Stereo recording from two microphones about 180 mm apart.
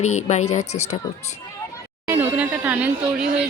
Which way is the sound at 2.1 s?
10° right (ahead or behind).